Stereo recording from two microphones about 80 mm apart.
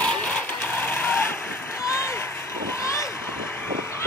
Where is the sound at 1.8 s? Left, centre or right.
Left.